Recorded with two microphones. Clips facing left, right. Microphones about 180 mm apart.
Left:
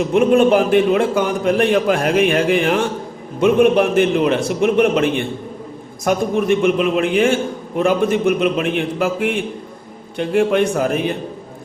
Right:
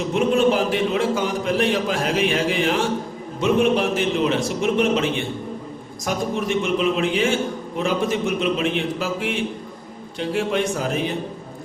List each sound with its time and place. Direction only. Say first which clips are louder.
0.1 s a man's voice: left 5 dB; 55° left (ahead or behind)